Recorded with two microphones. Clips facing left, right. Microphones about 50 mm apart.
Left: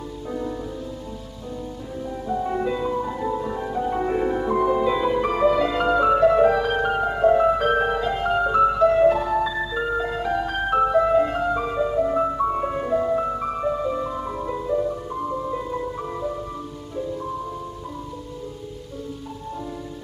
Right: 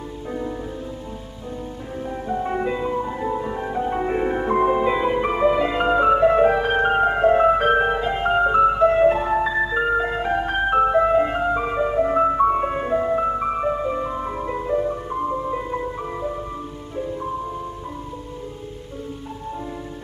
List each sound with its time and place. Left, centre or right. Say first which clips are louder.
0.3 s music: even; centre
2.0 s music: right 1 dB; right